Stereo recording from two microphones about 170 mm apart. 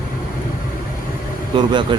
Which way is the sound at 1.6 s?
25° right (ahead or behind).